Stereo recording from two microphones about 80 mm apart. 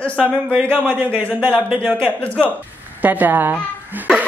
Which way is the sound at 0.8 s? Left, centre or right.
Right.